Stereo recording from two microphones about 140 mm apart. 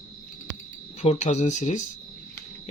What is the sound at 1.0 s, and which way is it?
Speech, 55° left (ahead or behind).